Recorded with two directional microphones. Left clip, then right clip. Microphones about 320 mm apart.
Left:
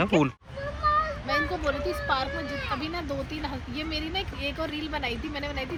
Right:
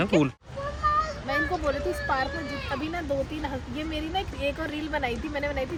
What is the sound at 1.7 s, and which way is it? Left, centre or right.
Speech, centre.